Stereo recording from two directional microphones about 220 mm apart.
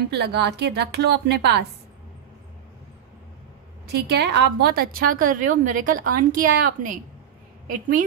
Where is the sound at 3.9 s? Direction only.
50° right (ahead or behind).